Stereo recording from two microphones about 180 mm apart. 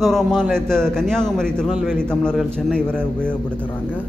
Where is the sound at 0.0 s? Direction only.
Centre (ahead or behind).